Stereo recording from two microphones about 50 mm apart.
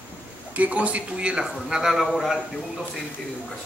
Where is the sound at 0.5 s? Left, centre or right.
Right; by 2.4 s centre.